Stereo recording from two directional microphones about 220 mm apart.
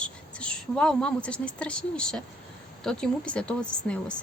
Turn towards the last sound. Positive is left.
turn(degrees=5)  # may be behind; listen again after turning